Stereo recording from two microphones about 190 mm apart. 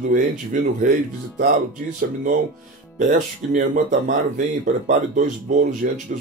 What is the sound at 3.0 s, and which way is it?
Speech, 45° right (ahead or behind).